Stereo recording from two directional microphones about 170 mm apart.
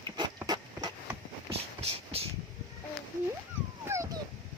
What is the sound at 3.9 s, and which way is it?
Dog, 15° right (ahead or behind).